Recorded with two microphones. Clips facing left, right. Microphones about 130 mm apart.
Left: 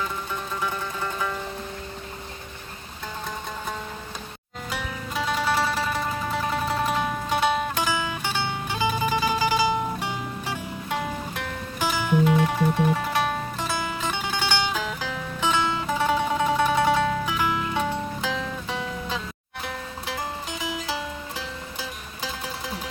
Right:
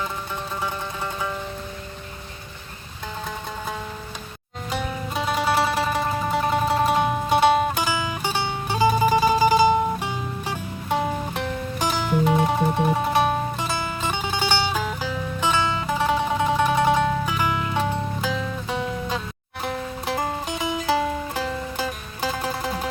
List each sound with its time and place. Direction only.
4.7 s music: 25° right (ahead or behind)
7.8 s music: 15° right (ahead or behind)
8.2 s music: 30° right (ahead or behind)
10.8 s music: 30° right (ahead or behind)
13.6 s music: 15° right (ahead or behind)
16.6 s music: 15° right (ahead or behind)
19.6 s music: 45° right (ahead or behind)